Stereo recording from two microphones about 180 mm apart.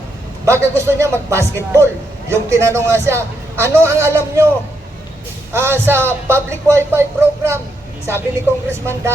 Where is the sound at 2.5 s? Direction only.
15° right (ahead or behind).